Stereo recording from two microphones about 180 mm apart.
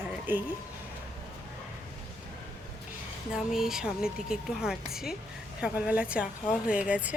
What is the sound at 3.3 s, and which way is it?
A woman's voice, centre (ahead or behind).